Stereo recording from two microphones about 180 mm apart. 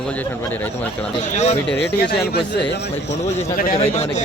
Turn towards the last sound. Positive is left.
turn(degrees=35)  # may be behind; listen again after turning